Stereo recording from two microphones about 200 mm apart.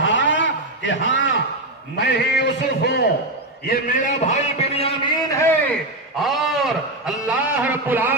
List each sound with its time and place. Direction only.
0.0 s a sound: 65° left (ahead or behind)
2.0 s a man's voice: 55° left (ahead or behind)
3.6 s a man's voice: 45° left (ahead or behind)
5.3 s a man's voice: 10° left (ahead or behind); by 8.1 s 10° right (ahead or behind)